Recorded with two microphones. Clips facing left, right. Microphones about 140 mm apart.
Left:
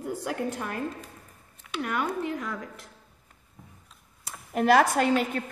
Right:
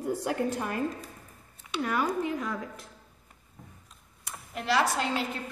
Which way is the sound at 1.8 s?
5° left (ahead or behind).